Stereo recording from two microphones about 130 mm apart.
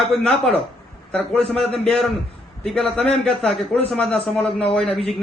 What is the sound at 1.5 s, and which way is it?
A man's voice, 5° left (ahead or behind).